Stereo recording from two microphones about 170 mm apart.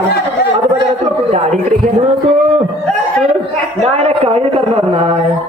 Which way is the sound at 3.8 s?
35° right (ahead or behind).